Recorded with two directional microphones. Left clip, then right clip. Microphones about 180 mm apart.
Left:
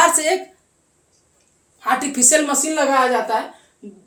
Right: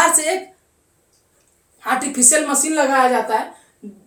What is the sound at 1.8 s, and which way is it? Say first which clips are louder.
Speech: even; 25° left (ahead or behind).